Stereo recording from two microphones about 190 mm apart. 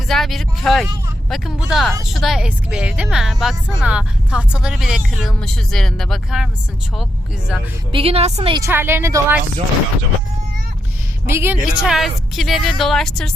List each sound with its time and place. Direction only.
0.1 s speech: centre (ahead or behind)
7.9 s a woman's voice: 30° right (ahead or behind)
8.5 s a woman's voice: 15° right (ahead or behind)
11.3 s speech: 10° right (ahead or behind)